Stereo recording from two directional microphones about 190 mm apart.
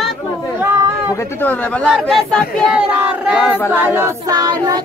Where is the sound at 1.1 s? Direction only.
10° left (ahead or behind).